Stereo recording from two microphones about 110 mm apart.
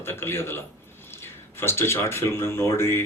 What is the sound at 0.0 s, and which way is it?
A man's voice, 20° left (ahead or behind).